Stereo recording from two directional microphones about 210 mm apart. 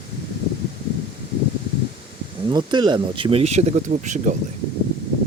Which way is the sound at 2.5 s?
20° right (ahead or behind).